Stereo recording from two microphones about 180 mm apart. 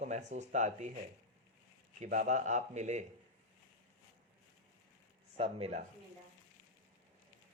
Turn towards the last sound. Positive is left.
turn(degrees=-35)  # may be behind; listen again after turning